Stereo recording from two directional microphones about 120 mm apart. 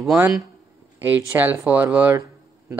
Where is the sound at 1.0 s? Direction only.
15° right (ahead or behind).